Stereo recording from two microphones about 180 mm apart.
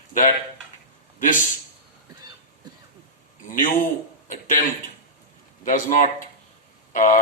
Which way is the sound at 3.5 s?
45° left (ahead or behind).